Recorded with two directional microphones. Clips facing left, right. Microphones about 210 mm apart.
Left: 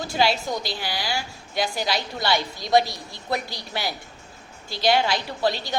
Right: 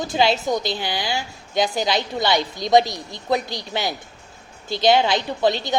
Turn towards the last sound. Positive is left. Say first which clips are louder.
# right 4 dB
turn(degrees=-20)  # may be behind; listen again after turning